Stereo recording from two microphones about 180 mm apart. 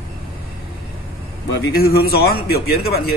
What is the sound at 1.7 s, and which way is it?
Speech, 60° left (ahead or behind).